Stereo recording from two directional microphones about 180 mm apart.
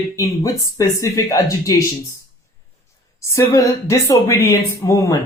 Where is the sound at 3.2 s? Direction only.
15° left (ahead or behind).